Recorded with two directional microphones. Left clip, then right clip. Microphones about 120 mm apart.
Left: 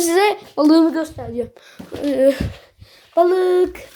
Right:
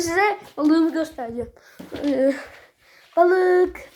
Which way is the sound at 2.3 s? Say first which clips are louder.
Left 6 dB; 60° left (ahead or behind).